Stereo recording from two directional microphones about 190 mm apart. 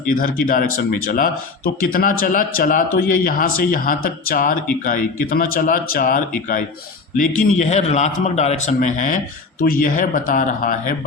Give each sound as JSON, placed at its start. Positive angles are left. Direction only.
{"t": 0.1, "sound": "speech", "side_deg": 50}